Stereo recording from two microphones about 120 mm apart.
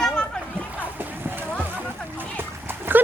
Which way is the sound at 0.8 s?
15° right (ahead or behind).